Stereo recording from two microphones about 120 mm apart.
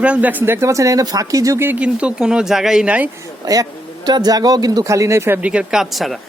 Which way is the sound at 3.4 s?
30° right (ahead or behind).